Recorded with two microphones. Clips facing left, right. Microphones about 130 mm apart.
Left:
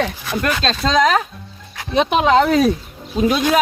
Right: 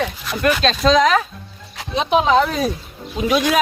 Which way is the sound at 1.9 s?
60° left (ahead or behind).